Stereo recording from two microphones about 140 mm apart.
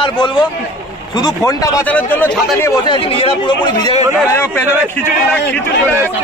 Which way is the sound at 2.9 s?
40° left (ahead or behind).